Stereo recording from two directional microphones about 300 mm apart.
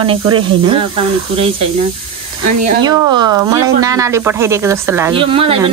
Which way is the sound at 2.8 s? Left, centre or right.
Centre.